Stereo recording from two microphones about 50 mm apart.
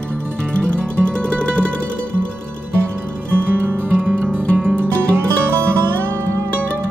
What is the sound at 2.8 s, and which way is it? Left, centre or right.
Music, right.